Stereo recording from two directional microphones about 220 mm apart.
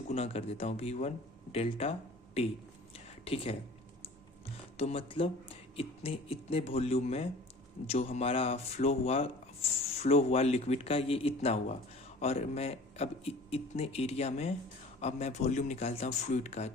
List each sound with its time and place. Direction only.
0.1 s speech: 25° left (ahead or behind)
2.9 s a sound: 25° left (ahead or behind)
4.8 s speech: 25° left (ahead or behind)